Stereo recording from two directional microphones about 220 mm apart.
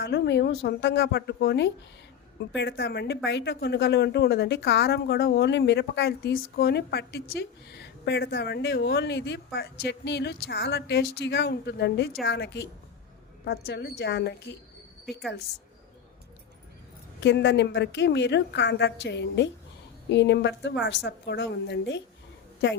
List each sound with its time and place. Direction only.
0.0 s speech: 50° left (ahead or behind)
17.2 s speech: 50° left (ahead or behind)